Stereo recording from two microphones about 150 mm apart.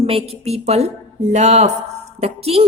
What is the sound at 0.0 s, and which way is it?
A woman's voice, 40° right (ahead or behind).